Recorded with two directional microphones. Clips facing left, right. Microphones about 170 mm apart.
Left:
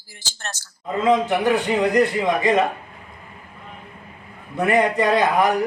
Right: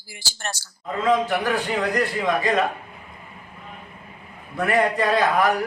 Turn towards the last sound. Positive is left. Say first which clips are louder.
# left 2 dB
turn(degrees=20)  # may be behind; listen again after turning